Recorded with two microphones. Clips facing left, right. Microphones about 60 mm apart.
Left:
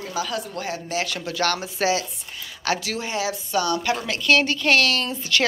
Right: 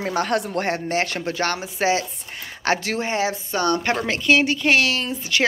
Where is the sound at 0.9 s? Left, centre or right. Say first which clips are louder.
Right 4 dB; right.